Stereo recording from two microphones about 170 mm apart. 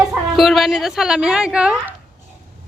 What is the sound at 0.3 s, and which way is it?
Speech, centre (ahead or behind).